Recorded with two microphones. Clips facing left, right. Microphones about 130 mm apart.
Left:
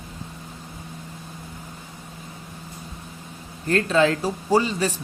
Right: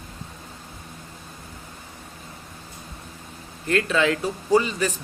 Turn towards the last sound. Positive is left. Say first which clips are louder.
# even
turn(degrees=30)  # may be behind; listen again after turning